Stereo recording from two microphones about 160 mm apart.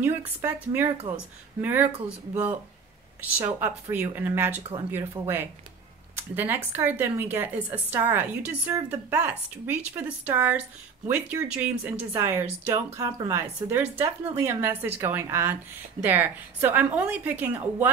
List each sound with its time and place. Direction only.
0.0 s a woman's voice: 10° right (ahead or behind)